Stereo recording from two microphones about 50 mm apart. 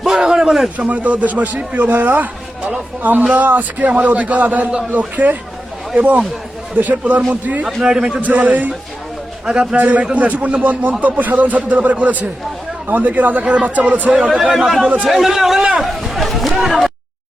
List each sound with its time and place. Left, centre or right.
0.0 s a sound: centre
0.8 s a man's voice: right
7.8 s a man's voice: centre
8.2 s a man's voice: right
9.7 s a man's voice: right
14.1 s a man's voice: centre
14.5 s a man's voice: centre